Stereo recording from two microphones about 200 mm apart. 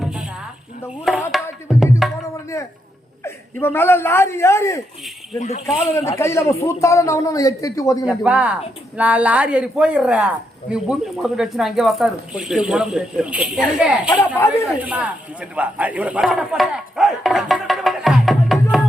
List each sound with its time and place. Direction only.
0.0 s a sound: 5° right (ahead or behind)
1.0 s music: centre (ahead or behind)
3.2 s speech: 10° left (ahead or behind)
5.4 s speech: 35° left (ahead or behind)
5.9 s a man's voice: 15° left (ahead or behind)
8.0 s a man's voice: 5° right (ahead or behind)